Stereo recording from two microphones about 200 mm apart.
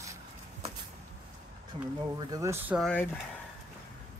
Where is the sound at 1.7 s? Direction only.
25° right (ahead or behind).